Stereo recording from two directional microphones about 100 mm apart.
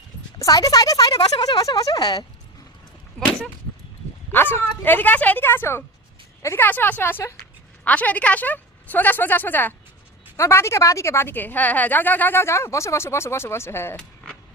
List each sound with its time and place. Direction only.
0.3 s speech: 35° left (ahead or behind)
4.3 s a woman's voice: 20° left (ahead or behind)